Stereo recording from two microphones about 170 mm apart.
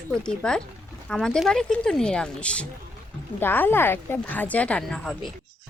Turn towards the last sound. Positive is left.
turn(degrees=0)  # may be behind; listen again after turning